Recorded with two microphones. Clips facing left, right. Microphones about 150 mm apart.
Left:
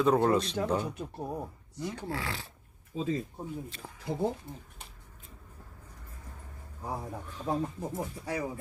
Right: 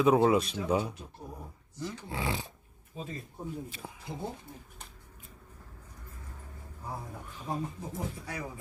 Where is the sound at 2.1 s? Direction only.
20° right (ahead or behind).